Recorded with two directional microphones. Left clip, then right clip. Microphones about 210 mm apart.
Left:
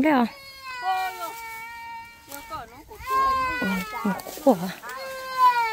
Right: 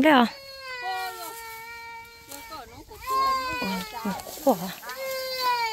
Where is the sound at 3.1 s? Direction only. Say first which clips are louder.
Left 2 dB; 5° left (ahead or behind).